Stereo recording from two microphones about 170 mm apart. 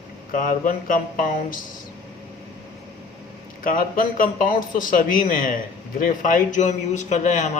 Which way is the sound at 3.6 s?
55° left (ahead or behind).